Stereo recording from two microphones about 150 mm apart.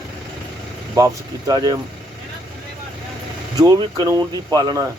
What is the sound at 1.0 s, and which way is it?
Speech, 25° right (ahead or behind).